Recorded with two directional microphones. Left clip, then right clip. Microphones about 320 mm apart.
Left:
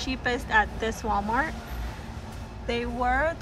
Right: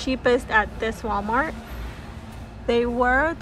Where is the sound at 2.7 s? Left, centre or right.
Centre.